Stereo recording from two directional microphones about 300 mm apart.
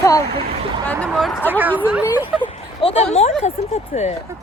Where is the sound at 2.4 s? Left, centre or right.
Centre.